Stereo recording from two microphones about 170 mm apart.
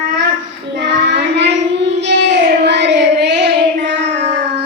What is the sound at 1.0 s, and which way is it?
Child singing, 90° right.